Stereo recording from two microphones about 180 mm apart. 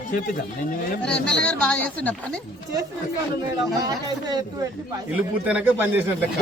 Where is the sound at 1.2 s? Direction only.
5° left (ahead or behind).